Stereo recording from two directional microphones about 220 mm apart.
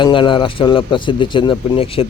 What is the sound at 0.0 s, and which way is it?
Speech, 20° left (ahead or behind).